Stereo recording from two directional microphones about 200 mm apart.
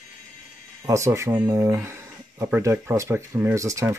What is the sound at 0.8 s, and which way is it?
Speech, 15° right (ahead or behind).